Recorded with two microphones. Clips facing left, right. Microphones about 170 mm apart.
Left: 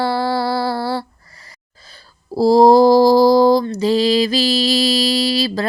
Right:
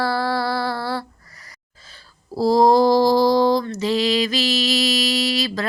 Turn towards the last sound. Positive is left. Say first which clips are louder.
# left 4 dB
turn(degrees=30)  # may be behind; listen again after turning